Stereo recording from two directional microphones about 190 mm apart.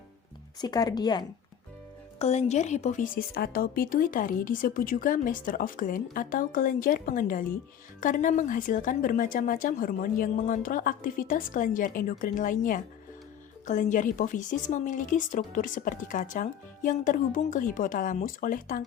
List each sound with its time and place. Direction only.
0.6 s speech: 20° left (ahead or behind)
2.1 s a woman's voice: 35° left (ahead or behind)